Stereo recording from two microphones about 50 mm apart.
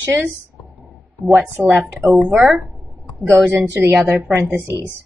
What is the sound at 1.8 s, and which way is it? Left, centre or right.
Speech, right.